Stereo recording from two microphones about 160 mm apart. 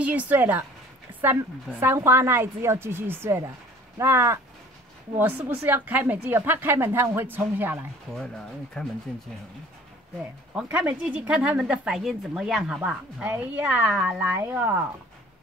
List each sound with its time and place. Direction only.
0.0 s speech: 10° right (ahead or behind)
8.8 s speech: 5° left (ahead or behind)
10.5 s speech: 10° right (ahead or behind)